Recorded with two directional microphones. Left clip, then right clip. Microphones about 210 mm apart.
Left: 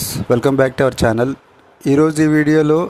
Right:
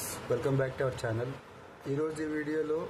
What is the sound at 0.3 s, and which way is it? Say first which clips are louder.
Speech: left 17 dB; 45° left (ahead or behind).